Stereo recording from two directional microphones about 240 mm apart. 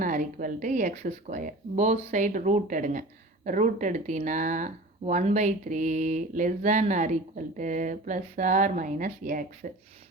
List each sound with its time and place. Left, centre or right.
0.0 s speech: right